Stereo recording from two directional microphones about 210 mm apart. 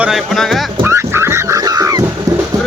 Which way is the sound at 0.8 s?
10° right (ahead or behind).